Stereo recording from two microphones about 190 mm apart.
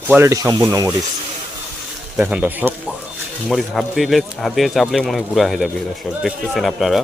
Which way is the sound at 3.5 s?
Centre (ahead or behind).